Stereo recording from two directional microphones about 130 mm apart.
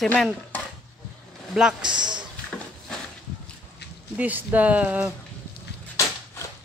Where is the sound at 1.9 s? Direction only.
35° right (ahead or behind).